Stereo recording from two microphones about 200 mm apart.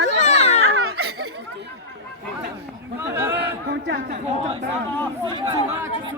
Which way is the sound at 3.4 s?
55° right (ahead or behind).